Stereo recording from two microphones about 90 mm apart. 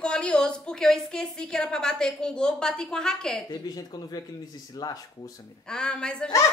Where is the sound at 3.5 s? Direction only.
45° left (ahead or behind).